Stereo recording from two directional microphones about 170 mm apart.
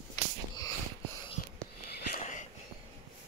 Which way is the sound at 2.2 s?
45° left (ahead or behind).